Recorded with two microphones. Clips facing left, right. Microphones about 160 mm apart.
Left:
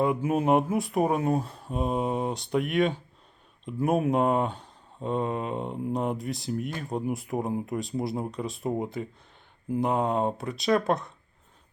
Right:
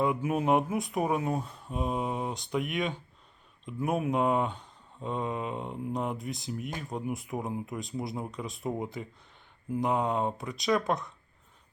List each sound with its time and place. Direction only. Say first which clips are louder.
0.0 s speech: left 3 dB; 25° left (ahead or behind)
2.6 s speech: left 6 dB; 15° right (ahead or behind)
3.7 s speech: left 5 dB; 30° left (ahead or behind)
6.1 s speech: left 5 dB; 15° right (ahead or behind)
6.8 s speech: left 4 dB; 30° left (ahead or behind)
10.0 s speech: left 3 dB; 30° left (ahead or behind)